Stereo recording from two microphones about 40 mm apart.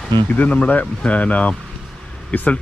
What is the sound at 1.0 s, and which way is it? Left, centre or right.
Speech, left.